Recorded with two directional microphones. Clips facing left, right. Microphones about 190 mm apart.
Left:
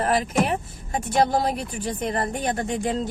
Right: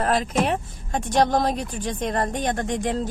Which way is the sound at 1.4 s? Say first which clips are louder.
Right 1 dB; 10° left (ahead or behind).